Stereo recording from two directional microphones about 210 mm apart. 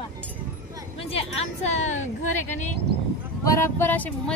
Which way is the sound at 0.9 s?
25° left (ahead or behind).